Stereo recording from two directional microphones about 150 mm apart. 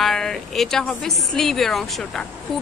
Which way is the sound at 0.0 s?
5° left (ahead or behind).